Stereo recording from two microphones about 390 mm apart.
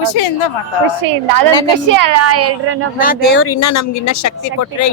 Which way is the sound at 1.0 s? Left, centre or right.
Right.